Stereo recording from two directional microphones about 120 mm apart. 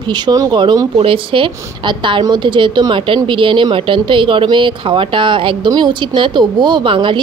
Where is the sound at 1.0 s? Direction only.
45° right (ahead or behind).